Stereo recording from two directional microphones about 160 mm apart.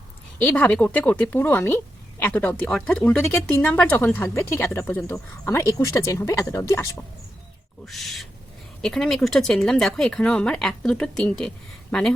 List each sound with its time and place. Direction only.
0.4 s speech: 10° left (ahead or behind)
7.9 s speech: centre (ahead or behind)